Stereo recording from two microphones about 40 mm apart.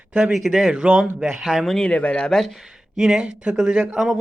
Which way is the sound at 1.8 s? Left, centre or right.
Left.